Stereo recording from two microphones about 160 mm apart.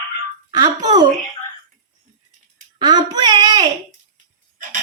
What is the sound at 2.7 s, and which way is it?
Speech, 25° right (ahead or behind).